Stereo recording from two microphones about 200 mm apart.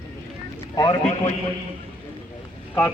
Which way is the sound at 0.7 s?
20° left (ahead or behind).